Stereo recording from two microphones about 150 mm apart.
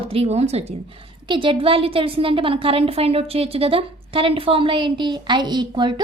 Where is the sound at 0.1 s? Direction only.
40° right (ahead or behind).